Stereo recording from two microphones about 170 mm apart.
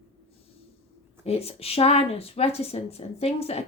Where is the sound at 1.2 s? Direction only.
35° left (ahead or behind).